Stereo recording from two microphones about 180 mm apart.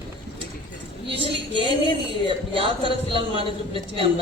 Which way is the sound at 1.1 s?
30° right (ahead or behind).